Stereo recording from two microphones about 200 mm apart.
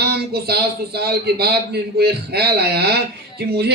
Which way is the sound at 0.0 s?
50° right (ahead or behind).